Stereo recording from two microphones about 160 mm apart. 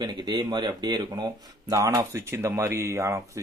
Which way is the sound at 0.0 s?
30° right (ahead or behind).